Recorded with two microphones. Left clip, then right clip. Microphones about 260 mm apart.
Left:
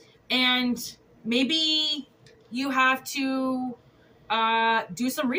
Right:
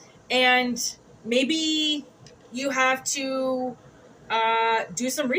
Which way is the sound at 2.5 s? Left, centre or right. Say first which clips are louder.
Even; centre.